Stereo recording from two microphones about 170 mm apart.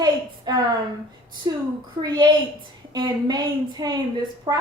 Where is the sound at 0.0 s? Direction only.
25° right (ahead or behind).